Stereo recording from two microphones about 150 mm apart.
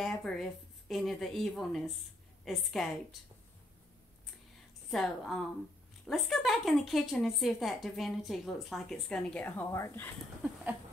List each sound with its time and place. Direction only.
0.0 s a woman's voice: centre (ahead or behind)
4.9 s a woman's voice: centre (ahead or behind)
9.7 s speech: 20° left (ahead or behind)
10.4 s a sound: 10° right (ahead or behind)